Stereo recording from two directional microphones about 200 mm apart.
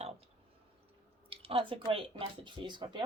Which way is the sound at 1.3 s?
30° right (ahead or behind).